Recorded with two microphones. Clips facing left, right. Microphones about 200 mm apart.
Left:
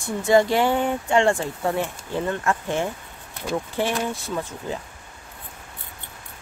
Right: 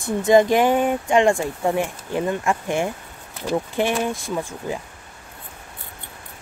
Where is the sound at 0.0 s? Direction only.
20° right (ahead or behind).